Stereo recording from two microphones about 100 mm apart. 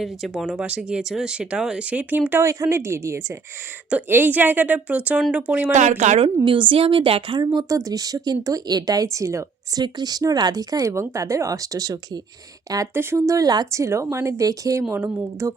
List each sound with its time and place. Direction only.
0.0 s speech: 5° right (ahead or behind); by 3.2 s 25° right (ahead or behind)
3.8 s speech: 15° right (ahead or behind)
6.1 s a woman's voice: 60° right (ahead or behind)
7.3 s speech: 40° right (ahead or behind)
12.9 s speech: 25° right (ahead or behind)
14.9 s speech: 20° right (ahead or behind)